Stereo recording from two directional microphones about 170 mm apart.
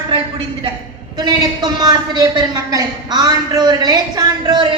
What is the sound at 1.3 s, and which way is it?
A woman's voice, 25° right (ahead or behind).